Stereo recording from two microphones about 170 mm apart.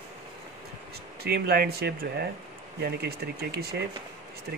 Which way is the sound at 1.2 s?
65° right (ahead or behind).